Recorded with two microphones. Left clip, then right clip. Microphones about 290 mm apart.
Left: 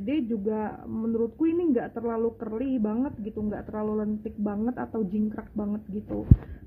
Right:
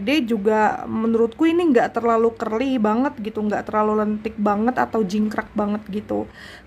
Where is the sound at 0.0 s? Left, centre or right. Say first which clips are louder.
Right 9 dB; right.